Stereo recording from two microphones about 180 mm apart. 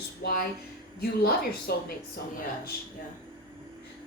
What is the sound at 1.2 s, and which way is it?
Speech, 60° left (ahead or behind).